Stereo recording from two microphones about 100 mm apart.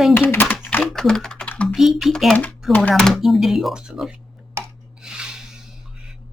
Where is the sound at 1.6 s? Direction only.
5° right (ahead or behind).